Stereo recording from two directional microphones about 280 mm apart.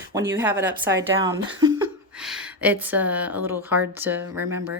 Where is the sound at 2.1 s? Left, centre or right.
Centre.